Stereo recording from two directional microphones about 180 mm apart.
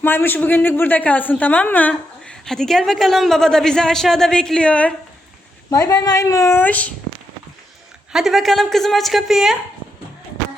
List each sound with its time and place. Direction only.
0.0 s a woman's voice: 10° left (ahead or behind)
5.7 s a woman's voice: 15° left (ahead or behind)
8.1 s a woman's voice: centre (ahead or behind)